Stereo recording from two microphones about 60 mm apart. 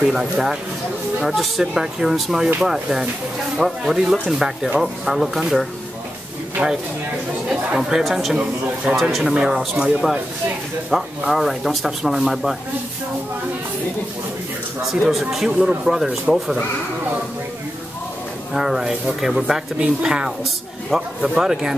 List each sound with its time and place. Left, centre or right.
0.1 s speech: centre
6.6 s speech: right
7.4 s speech: centre
8.9 s speech: centre
10.9 s speech: centre
14.8 s speech: centre
15.5 s speech: centre
18.5 s speech: centre